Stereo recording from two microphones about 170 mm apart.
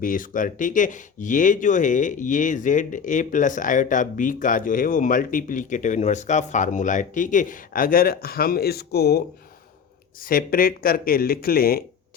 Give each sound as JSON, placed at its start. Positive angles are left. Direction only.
{"t": 0.0, "sound": "speech", "side_deg": 50}
{"t": 10.2, "sound": "speech", "side_deg": 60}